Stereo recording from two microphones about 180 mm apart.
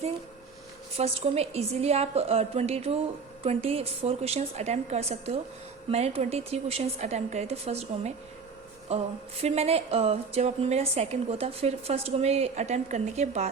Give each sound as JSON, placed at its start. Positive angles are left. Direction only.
{"t": 0.9, "sound": "a woman's voice", "side_deg": -35}